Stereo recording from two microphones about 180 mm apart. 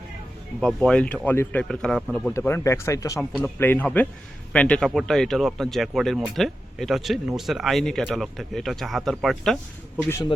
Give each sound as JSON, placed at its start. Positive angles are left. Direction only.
{"t": 0.6, "sound": "speech", "side_deg": 5}
{"t": 2.3, "sound": "speech", "side_deg": 15}